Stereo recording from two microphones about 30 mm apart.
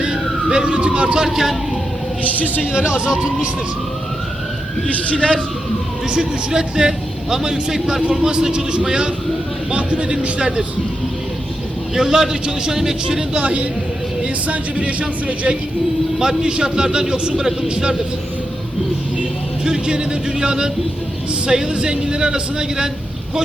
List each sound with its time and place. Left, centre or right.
0.5 s a man's voice: right
1.0 s a man's voice: right
2.2 s a man's voice: left
3.0 s a man's voice: right
5.1 s a man's voice: left
6.1 s a man's voice: right
9.7 s a man's voice: right
11.9 s speech: centre
13.4 s speech: right
16.4 s a man's voice: right
19.6 s a man's voice: right